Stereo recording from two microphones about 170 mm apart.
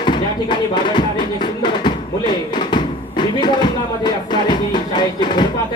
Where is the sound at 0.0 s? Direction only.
25° left (ahead or behind).